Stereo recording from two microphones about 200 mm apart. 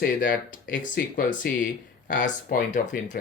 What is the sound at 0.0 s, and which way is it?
Speech, 45° left (ahead or behind).